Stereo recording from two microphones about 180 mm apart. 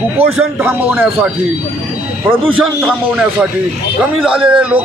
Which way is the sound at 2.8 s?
5° right (ahead or behind).